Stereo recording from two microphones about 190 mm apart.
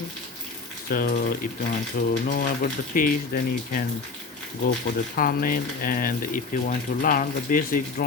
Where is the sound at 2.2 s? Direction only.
50° left (ahead or behind).